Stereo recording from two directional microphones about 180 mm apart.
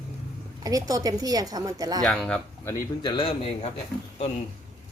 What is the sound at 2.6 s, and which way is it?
A man's voice, 25° left (ahead or behind).